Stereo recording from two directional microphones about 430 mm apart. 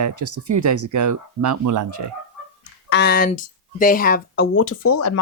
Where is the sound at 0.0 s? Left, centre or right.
Right.